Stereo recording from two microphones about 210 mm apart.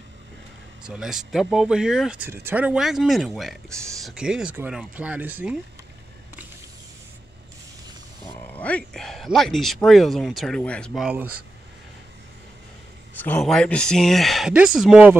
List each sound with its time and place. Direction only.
0.8 s speech: 5° right (ahead or behind)
8.5 s speech: 5° left (ahead or behind)
13.2 s speech: 5° left (ahead or behind)